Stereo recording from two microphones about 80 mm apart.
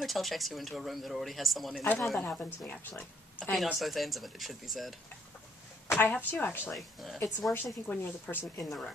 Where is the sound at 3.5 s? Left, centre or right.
Centre.